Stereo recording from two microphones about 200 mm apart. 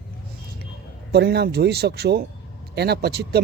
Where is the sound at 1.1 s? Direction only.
55° right (ahead or behind).